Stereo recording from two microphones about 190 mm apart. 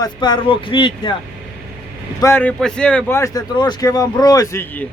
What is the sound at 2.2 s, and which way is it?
Speech, 10° left (ahead or behind).